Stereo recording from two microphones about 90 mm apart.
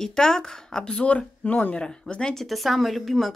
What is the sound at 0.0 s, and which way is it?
Speech, 5° left (ahead or behind).